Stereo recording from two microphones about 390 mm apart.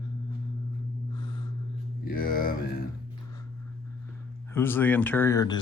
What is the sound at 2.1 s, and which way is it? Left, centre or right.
Speech, left.